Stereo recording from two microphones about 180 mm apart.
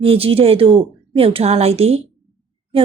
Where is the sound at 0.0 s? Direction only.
30° right (ahead or behind).